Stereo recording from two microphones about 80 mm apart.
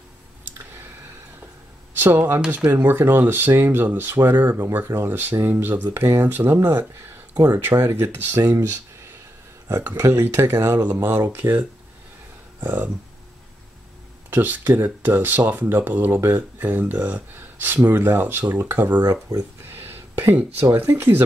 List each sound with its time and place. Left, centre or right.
2.0 s speech: right
2.4 s speech: centre
9.8 s speech: right
14.3 s speech: right
19.7 s a sound: right
20.7 s speech: right